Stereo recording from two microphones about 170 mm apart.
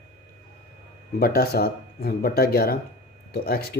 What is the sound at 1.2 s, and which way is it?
Speech, 65° left (ahead or behind).